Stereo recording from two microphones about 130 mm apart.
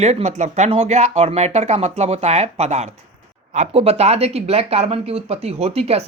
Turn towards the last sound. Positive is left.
turn(degrees=-50)  # may be behind; listen again after turning